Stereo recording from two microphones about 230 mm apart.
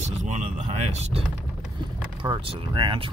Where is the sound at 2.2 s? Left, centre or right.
Right.